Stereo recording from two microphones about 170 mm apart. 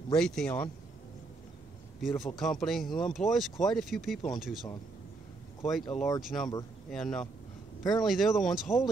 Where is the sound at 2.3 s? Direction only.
Centre (ahead or behind).